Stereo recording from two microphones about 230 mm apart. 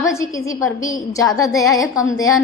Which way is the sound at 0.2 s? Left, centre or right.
Centre.